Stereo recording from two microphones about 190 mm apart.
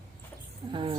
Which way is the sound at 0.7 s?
25° right (ahead or behind).